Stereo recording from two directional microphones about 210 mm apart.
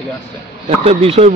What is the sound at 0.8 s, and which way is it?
Speech, 30° right (ahead or behind).